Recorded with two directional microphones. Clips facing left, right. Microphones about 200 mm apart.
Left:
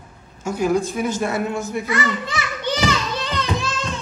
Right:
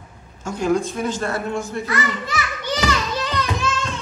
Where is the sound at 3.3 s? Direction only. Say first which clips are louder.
Left 1 dB; 30° left (ahead or behind).